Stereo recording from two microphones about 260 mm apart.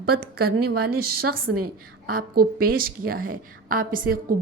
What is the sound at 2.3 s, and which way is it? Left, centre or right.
A woman's voice, right.